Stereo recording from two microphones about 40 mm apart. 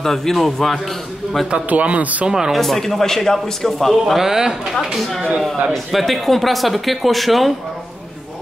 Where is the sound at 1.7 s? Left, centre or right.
Right.